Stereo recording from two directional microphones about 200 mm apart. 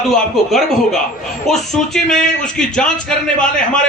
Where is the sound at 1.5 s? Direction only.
Centre (ahead or behind).